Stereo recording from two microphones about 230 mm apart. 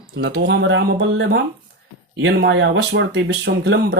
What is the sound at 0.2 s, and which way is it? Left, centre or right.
Speech, right.